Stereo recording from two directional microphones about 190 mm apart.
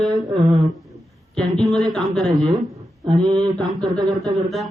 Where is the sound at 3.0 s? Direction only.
20° right (ahead or behind).